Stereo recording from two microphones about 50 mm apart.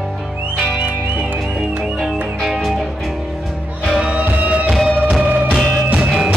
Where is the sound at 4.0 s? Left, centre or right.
Right.